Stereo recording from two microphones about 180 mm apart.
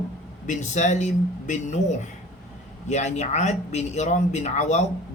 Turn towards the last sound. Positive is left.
turn(degrees=40)  # may be behind; listen again after turning